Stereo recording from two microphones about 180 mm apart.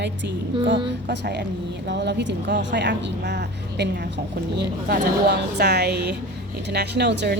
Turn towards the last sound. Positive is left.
turn(degrees=-70)  # may be behind; listen again after turning